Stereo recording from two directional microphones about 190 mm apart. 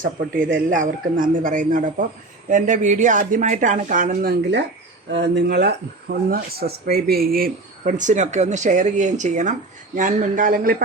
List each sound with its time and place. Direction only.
0.7 s speech: 45° right (ahead or behind)
5.1 s speech: 65° right (ahead or behind); by 10.8 s 50° right (ahead or behind)